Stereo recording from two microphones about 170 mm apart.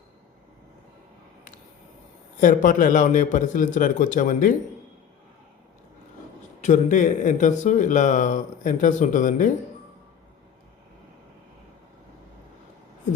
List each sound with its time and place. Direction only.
2.4 s speech: 50° left (ahead or behind)
6.6 s speech: 45° left (ahead or behind)